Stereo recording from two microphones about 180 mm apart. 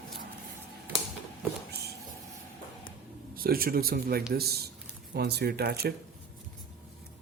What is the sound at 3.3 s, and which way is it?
Speech, 55° right (ahead or behind).